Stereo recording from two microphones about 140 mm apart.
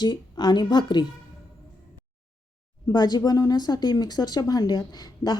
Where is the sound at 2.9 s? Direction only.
30° left (ahead or behind).